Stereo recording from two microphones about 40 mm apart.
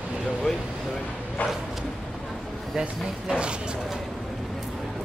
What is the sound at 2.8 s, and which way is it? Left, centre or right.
Speech, centre.